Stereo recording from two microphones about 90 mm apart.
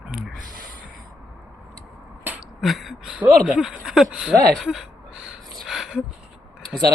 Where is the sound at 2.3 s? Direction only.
20° right (ahead or behind).